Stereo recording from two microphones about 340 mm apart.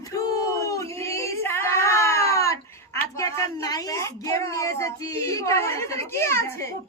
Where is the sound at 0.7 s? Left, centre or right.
Centre.